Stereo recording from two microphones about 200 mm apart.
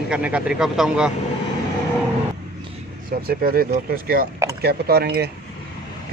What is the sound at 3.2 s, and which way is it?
Speech, 45° right (ahead or behind).